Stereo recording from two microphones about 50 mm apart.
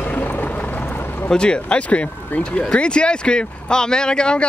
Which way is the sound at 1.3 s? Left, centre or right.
Centre.